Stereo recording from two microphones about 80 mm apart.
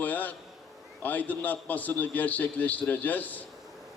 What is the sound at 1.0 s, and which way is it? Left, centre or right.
A man's voice, left.